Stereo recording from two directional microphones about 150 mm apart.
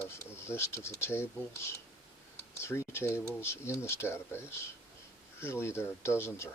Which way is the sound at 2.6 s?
15° left (ahead or behind).